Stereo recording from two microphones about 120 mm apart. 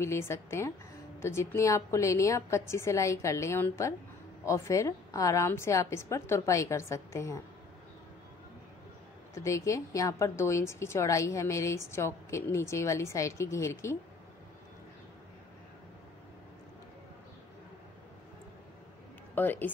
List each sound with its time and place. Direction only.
0.0 s a woman's voice: 20° left (ahead or behind)
9.3 s a woman's voice: 25° left (ahead or behind)
19.3 s speech: 15° left (ahead or behind)